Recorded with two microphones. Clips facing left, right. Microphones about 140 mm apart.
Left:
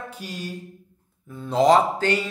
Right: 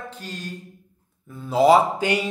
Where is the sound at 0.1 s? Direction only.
10° left (ahead or behind).